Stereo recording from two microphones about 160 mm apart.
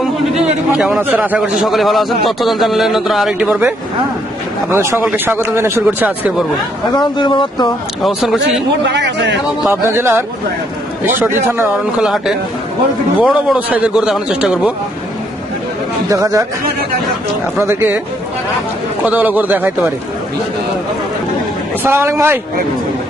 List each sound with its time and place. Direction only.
0.9 s a man's voice: 15° right (ahead or behind)
6.9 s speech: 30° left (ahead or behind)
8.0 s a man's voice: centre (ahead or behind)
8.9 s speech: 90° right
9.8 s speech: 15° right (ahead or behind)
11.9 s a man's voice: 5° right (ahead or behind)
16.0 s speech: 20° right (ahead or behind)
17.6 s speech: 15° right (ahead or behind)
19.0 s speech: 10° right (ahead or behind)
21.8 s speech: 15° right (ahead or behind)